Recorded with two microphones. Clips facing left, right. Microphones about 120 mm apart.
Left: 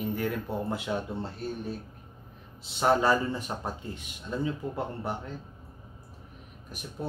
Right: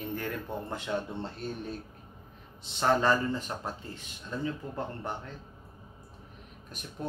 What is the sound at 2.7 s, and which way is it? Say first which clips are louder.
Speech: left 2 dB; 10° left (ahead or behind).